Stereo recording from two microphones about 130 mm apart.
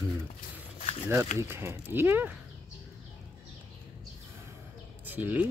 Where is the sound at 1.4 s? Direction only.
20° right (ahead or behind).